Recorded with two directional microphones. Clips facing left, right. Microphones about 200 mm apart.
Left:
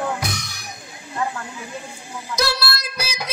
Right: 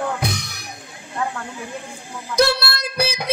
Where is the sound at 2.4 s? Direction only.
55° right (ahead or behind).